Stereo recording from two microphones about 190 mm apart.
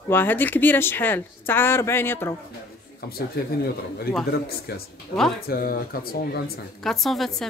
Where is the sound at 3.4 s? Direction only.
55° left (ahead or behind).